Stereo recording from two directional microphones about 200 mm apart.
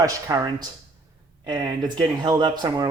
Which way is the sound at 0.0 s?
20° right (ahead or behind).